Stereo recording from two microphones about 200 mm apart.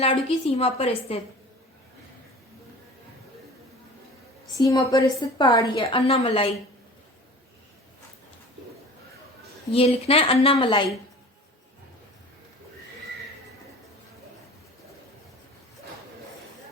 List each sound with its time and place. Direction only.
0.0 s a woman's voice: 30° left (ahead or behind)
4.5 s a woman's voice: 15° left (ahead or behind)
9.7 s a woman's voice: 30° left (ahead or behind)